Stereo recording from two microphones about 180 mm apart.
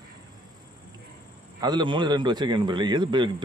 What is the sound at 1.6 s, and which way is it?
A man's voice, 25° right (ahead or behind).